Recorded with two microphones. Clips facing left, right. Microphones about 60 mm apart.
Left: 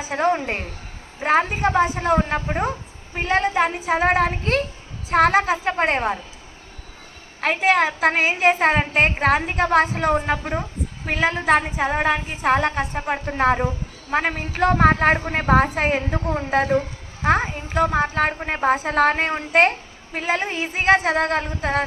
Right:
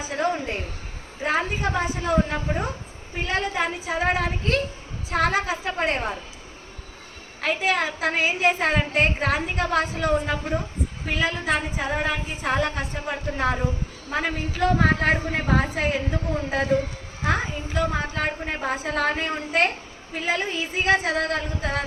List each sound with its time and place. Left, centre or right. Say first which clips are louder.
0.1 s a woman's voice: left 5 dB; left
7.4 s a woman's voice: left 5 dB; left
10.4 s a woman's voice: left 1 dB; left
11.1 s a woman's voice: left 6 dB; left